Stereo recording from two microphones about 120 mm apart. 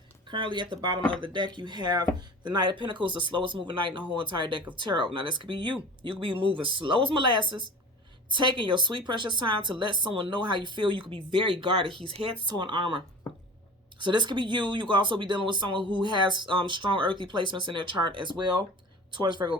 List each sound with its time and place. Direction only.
0.3 s speech: 40° right (ahead or behind)
14.0 s speech: 40° right (ahead or behind)